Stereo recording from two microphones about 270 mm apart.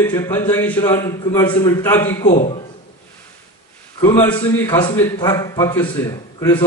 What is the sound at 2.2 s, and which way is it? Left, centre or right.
Speech, left.